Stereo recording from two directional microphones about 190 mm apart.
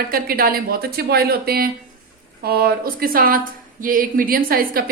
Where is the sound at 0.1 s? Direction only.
50° right (ahead or behind).